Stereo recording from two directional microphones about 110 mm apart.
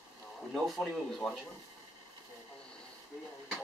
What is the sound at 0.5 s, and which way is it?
Speech, centre (ahead or behind).